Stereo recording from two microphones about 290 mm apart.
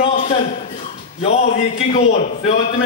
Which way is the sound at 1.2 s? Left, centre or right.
Left.